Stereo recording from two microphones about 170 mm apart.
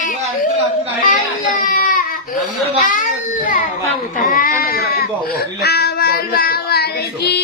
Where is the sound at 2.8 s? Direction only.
50° left (ahead or behind).